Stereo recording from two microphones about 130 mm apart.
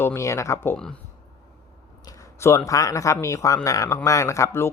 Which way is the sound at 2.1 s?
20° left (ahead or behind).